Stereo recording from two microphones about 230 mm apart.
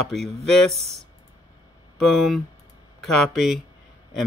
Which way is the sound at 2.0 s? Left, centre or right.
Centre.